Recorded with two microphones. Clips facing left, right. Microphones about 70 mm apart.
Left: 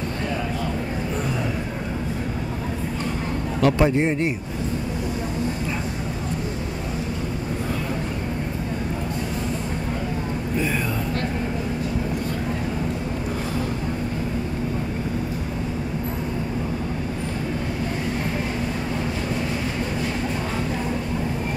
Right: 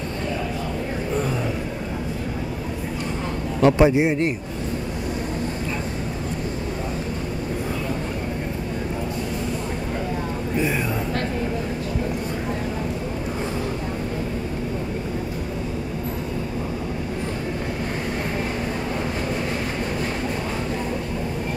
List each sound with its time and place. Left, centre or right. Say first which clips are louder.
3.6 s speech: right 3 dB; right